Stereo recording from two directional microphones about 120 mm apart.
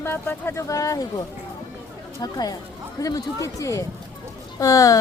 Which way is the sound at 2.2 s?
35° left (ahead or behind).